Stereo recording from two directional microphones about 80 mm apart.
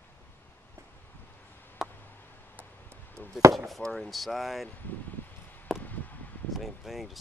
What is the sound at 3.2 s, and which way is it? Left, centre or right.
Chopping, left.